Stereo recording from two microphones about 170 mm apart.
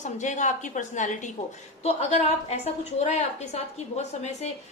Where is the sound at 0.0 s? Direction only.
45° left (ahead or behind).